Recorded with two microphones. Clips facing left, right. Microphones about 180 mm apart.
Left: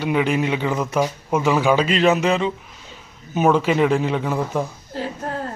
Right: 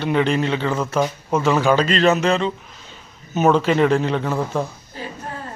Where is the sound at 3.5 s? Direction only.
10° left (ahead or behind).